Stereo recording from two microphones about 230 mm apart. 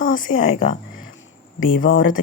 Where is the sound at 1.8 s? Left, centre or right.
Left.